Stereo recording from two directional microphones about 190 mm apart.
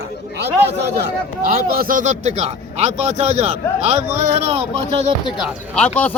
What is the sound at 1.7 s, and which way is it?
Speech, 50° right (ahead or behind).